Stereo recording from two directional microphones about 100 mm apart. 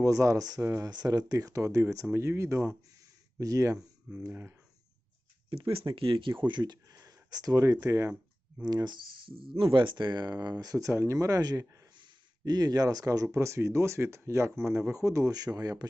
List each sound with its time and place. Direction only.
0.0 s speech: 35° right (ahead or behind)
4.3 s speech: 20° right (ahead or behind)
5.5 s speech: 65° right (ahead or behind); by 8.1 s 35° right (ahead or behind)
8.6 s speech: 45° right (ahead or behind)
9.4 s speech: 60° right (ahead or behind); by 15.9 s 40° right (ahead or behind)